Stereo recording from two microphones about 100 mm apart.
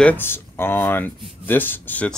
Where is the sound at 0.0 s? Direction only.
20° left (ahead or behind).